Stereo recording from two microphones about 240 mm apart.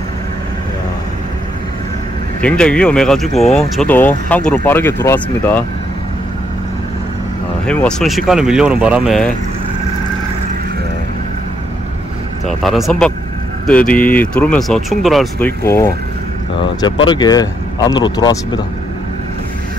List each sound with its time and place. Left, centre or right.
2.4 s speech: centre
7.6 s speech: centre
12.4 s speech: centre
15.6 s speech: centre